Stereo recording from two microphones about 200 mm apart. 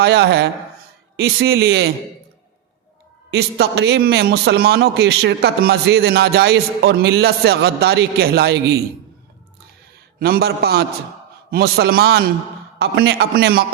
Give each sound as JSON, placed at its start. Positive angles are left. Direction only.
{"t": 0.0, "sound": "a man's voice", "side_deg": -55}
{"t": 3.3, "sound": "a man's voice", "side_deg": -55}
{"t": 10.2, "sound": "a man's voice", "side_deg": -50}